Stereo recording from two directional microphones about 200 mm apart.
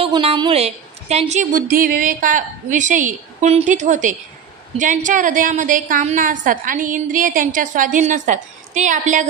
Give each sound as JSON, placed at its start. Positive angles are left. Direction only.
{"t": 0.0, "sound": "a woman's voice", "side_deg": -30}